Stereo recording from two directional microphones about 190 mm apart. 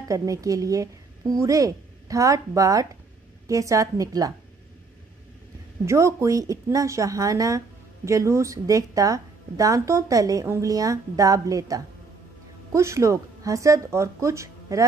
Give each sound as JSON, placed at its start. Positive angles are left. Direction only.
{"t": 0.1, "sound": "a woman's voice", "side_deg": -15}
{"t": 5.9, "sound": "a woman's voice", "side_deg": -15}